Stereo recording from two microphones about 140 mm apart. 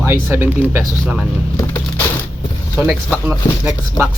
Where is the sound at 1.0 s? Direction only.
5° right (ahead or behind).